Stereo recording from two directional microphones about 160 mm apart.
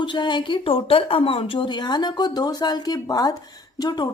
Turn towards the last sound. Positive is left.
turn(degrees=25)  # may be behind; listen again after turning